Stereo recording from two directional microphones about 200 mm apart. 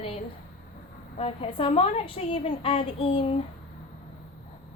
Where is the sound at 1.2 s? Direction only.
30° left (ahead or behind).